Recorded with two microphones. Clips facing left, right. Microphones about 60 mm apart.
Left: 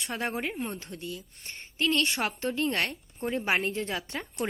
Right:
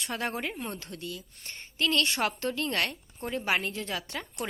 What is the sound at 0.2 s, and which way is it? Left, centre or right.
A woman's voice, centre.